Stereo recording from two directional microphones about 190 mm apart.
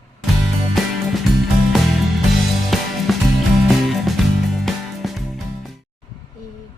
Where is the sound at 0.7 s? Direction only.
Centre (ahead or behind).